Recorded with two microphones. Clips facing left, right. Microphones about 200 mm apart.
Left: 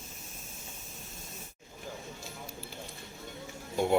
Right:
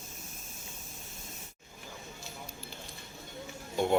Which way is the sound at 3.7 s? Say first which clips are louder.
Left 1 dB; 5° left (ahead or behind).